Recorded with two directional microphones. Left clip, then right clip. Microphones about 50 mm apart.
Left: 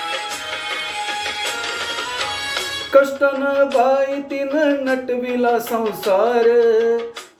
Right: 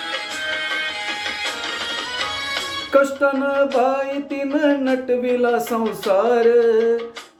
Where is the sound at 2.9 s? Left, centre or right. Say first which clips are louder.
Left 2 dB; right.